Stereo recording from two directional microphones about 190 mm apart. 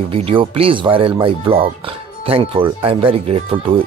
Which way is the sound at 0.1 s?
30° right (ahead or behind).